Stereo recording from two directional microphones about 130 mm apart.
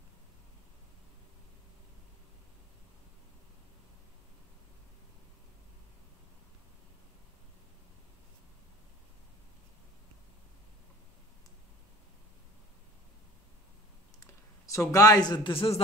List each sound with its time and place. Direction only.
14.2 s a man's voice: 25° left (ahead or behind); by 15.8 s 45° left (ahead or behind)